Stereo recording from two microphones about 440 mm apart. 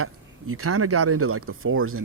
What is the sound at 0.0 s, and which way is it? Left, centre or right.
Speech, right.